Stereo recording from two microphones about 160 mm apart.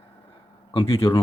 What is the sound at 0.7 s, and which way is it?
Speech, 35° left (ahead or behind).